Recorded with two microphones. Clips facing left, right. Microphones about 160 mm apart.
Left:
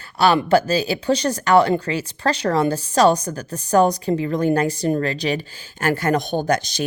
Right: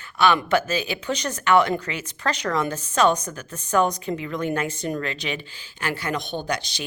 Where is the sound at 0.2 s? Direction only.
35° left (ahead or behind).